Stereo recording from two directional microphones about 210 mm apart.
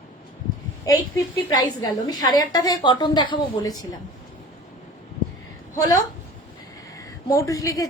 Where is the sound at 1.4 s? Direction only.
20° left (ahead or behind).